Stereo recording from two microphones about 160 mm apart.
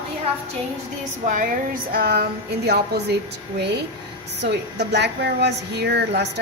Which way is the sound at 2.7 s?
90° right.